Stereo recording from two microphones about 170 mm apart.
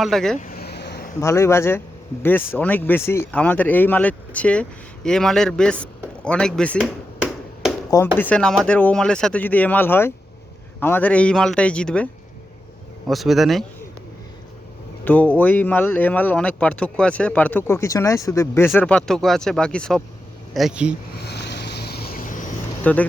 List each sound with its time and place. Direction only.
0.0 s speech: centre (ahead or behind)
0.3 s a sound: 55° left (ahead or behind)
1.2 s speech: 15° left (ahead or behind)
6.2 s chop: 5° left (ahead or behind)
7.9 s speech: 20° left (ahead or behind)
8.2 s speech: 5° left (ahead or behind)
13.1 s speech: centre (ahead or behind)
15.0 s speech: 10° left (ahead or behind)
18.8 s speech: 5° left (ahead or behind)
21.2 s vehicle: 80° left; by 22.4 s 50° left (ahead or behind)
22.8 s speech: 10° left (ahead or behind)